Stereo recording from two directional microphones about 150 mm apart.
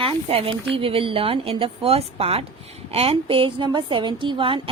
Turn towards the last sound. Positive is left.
turn(degrees=-35)  # may be behind; listen again after turning